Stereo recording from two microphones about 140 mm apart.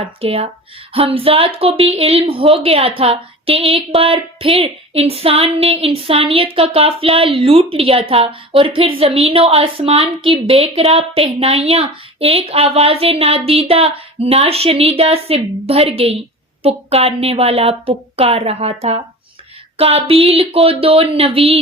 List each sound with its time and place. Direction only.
0.2 s a woman's voice: 45° right (ahead or behind)